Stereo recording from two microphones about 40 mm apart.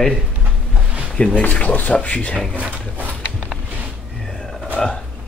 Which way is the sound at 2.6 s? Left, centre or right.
Right.